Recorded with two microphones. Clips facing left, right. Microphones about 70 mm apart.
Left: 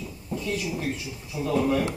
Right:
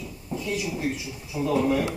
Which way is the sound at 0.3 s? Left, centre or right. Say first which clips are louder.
Even; centre.